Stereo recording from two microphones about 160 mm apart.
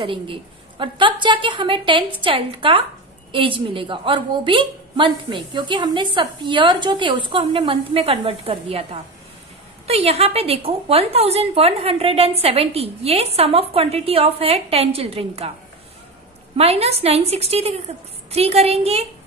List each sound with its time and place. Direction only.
0.0 s a woman's voice: 30° right (ahead or behind)
16.5 s a woman's voice: 40° right (ahead or behind)